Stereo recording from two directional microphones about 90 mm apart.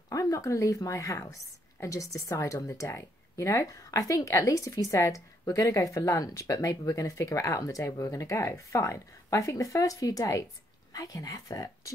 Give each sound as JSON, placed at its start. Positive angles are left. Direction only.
{"t": 0.1, "sound": "a woman's voice", "side_deg": 40}